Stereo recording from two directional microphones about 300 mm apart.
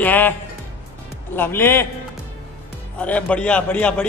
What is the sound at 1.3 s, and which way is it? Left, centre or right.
Speech, centre.